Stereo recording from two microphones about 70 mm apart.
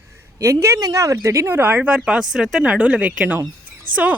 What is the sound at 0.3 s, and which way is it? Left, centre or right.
Speech, right.